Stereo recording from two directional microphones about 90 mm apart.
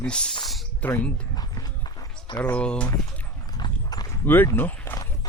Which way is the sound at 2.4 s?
15° left (ahead or behind).